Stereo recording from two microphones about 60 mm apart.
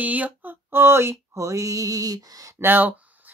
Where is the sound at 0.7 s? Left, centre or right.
Right.